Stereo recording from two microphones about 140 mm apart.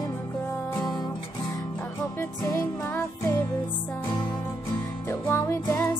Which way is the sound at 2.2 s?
20° left (ahead or behind).